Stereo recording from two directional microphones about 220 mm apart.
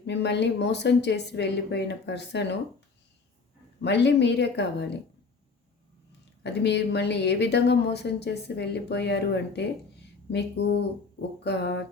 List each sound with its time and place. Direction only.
0.0 s speech: 50° left (ahead or behind)
3.8 s speech: 50° left (ahead or behind)
6.4 s speech: 50° left (ahead or behind)